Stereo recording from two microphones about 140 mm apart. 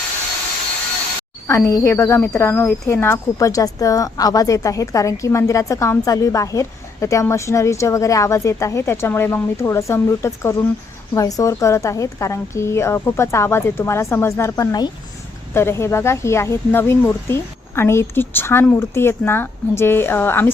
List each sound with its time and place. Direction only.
1.5 s a woman's voice: 20° left (ahead or behind)